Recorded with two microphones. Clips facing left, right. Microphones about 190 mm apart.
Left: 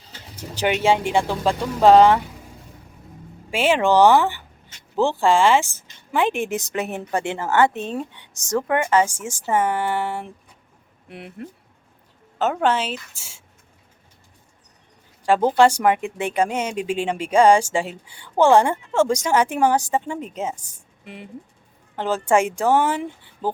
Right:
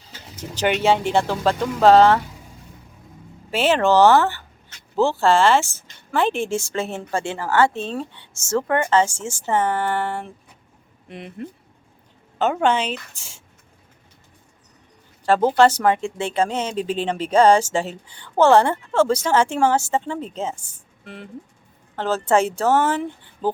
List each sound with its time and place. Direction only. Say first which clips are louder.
0.3 s speech: right 1 dB; 10° left (ahead or behind)
3.5 s a woman's voice: even; 10° left (ahead or behind)
15.5 s a woman's voice: even; 10° left (ahead or behind)